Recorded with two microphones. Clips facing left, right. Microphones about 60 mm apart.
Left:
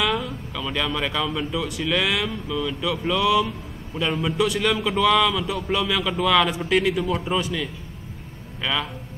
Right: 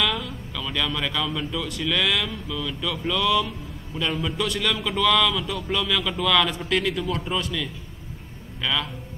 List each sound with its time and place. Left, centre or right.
0.0 s a man's voice: centre